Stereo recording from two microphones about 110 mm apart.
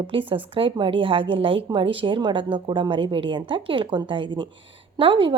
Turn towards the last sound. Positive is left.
turn(degrees=-55)  # may be behind; listen again after turning